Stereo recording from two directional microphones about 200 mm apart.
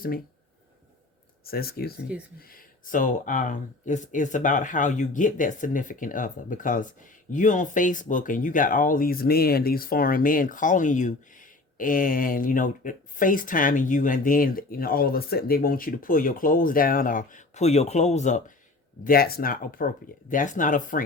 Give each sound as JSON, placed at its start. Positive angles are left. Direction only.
{"t": 1.5, "sound": "speech", "side_deg": 50}
{"t": 19.0, "sound": "speech", "side_deg": 50}